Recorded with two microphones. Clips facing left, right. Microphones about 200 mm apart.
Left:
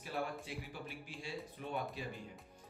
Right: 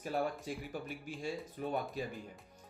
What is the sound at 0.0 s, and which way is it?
Speech, 45° right (ahead or behind).